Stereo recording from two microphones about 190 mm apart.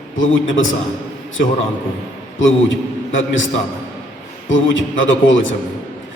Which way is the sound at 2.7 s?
80° left.